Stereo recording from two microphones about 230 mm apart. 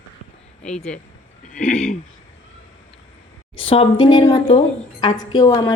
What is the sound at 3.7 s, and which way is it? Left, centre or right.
A woman's voice, left.